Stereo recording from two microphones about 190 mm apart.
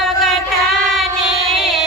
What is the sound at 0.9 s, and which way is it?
Music, centre (ahead or behind).